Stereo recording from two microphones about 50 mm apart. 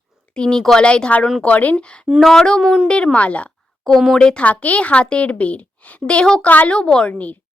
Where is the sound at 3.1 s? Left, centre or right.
Left.